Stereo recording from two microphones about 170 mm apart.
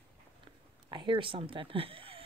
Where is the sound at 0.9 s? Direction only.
30° right (ahead or behind).